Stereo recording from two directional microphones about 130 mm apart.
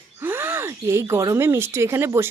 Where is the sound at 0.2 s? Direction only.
15° right (ahead or behind).